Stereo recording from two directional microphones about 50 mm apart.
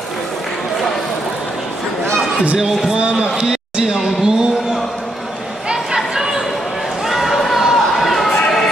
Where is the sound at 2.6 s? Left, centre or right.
Centre.